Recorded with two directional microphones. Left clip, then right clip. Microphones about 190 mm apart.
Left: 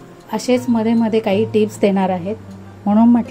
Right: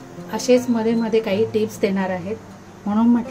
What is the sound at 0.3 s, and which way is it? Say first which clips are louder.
Speech: even; 40° left (ahead or behind).